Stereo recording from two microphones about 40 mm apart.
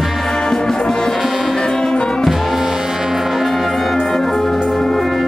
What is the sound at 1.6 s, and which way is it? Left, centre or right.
Music, centre.